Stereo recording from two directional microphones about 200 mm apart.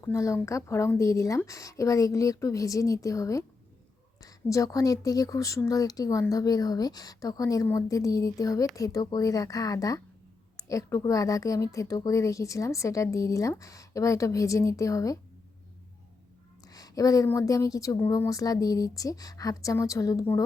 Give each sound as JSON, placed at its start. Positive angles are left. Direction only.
{"t": 0.0, "sound": "a woman's voice", "side_deg": 15}
{"t": 16.6, "sound": "a woman's voice", "side_deg": 20}